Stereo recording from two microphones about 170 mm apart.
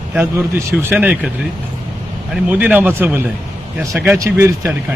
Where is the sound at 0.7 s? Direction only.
10° right (ahead or behind).